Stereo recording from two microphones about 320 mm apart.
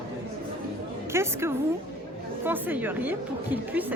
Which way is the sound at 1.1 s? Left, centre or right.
Centre.